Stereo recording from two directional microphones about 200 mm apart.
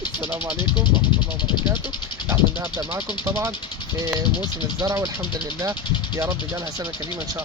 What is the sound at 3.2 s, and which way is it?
Speech, 15° right (ahead or behind).